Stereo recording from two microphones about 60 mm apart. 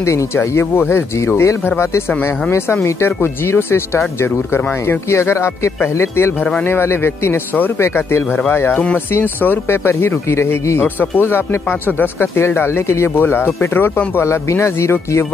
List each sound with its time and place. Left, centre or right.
0.0 s speech: left
9.8 s speech: left
13.1 s speech: left